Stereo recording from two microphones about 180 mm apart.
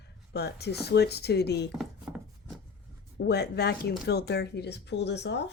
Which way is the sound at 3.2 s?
65° left (ahead or behind).